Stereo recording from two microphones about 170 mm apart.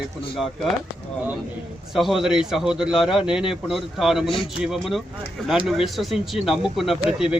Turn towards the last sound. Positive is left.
turn(degrees=-5)  # may be behind; listen again after turning